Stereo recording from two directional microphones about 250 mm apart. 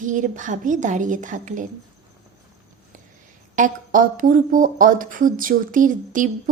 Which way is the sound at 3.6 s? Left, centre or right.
Right.